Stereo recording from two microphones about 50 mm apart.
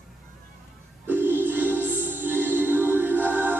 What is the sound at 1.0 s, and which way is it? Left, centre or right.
Music, right.